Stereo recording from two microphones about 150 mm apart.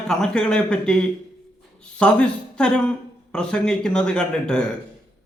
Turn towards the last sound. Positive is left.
turn(degrees=5)  # may be behind; listen again after turning